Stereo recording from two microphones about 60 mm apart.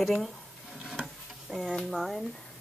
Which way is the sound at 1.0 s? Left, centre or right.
Centre.